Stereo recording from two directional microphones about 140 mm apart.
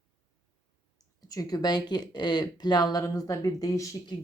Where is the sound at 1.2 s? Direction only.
25° left (ahead or behind).